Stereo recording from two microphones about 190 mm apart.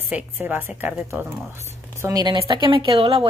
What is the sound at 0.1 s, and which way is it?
A woman's voice, 10° right (ahead or behind).